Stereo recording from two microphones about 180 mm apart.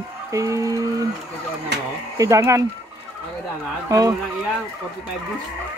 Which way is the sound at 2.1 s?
15° right (ahead or behind).